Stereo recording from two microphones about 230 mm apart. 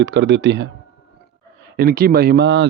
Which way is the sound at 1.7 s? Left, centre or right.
Right.